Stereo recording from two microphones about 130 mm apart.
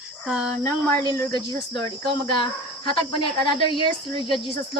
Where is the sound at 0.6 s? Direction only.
30° left (ahead or behind).